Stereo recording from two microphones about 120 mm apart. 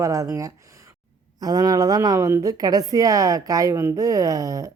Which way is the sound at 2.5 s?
30° right (ahead or behind).